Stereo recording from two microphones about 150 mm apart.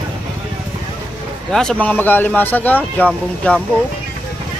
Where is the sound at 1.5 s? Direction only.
5° left (ahead or behind).